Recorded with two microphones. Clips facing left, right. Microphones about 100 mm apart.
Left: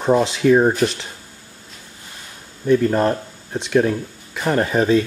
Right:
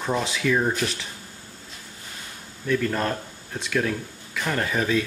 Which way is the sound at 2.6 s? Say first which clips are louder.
Left 8 dB; 30° left (ahead or behind).